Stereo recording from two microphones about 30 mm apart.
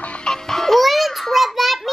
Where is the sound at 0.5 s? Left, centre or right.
Centre.